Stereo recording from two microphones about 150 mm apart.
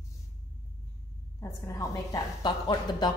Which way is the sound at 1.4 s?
20° left (ahead or behind).